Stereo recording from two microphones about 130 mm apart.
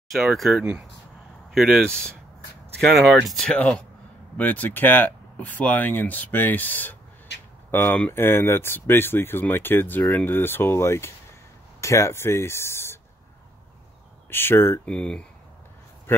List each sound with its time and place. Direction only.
0.1 s speech: centre (ahead or behind); by 13.0 s 20° left (ahead or behind)
14.3 s speech: 15° left (ahead or behind)
14.9 s speech: 5° left (ahead or behind)